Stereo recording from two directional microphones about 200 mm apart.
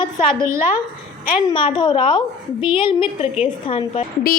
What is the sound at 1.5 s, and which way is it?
A woman's voice, 25° left (ahead or behind).